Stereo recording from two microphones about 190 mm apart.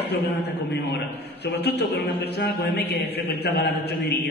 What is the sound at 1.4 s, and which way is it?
A man's voice, 60° left (ahead or behind).